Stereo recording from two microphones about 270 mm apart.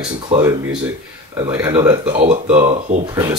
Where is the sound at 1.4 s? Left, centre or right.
Centre.